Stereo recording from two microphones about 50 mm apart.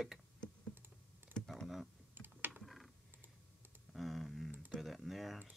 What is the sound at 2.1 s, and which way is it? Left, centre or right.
Typing, right.